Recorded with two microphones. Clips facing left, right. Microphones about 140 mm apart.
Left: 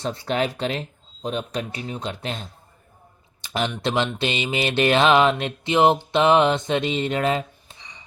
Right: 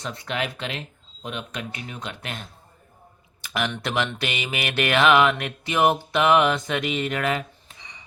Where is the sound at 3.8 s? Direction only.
25° left (ahead or behind).